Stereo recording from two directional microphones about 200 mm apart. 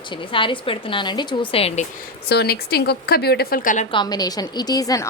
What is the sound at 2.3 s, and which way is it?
A woman's voice, 55° left (ahead or behind).